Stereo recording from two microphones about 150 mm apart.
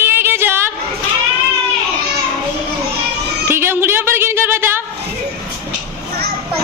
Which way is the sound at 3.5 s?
15° right (ahead or behind).